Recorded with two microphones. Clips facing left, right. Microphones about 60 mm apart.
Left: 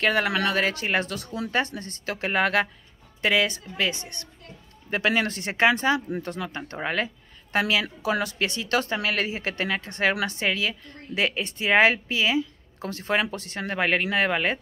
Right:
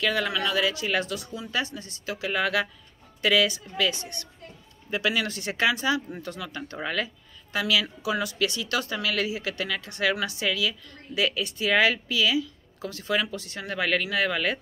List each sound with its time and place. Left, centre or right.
0.0 s speech: left
3.2 s speech: left